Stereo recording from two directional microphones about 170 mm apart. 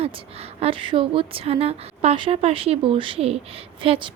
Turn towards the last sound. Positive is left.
turn(degrees=-30)  # may be behind; listen again after turning